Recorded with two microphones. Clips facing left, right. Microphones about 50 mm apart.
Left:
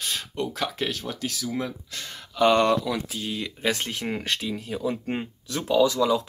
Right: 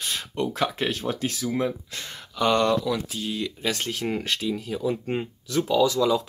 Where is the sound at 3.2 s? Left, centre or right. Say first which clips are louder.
Right 2 dB; centre.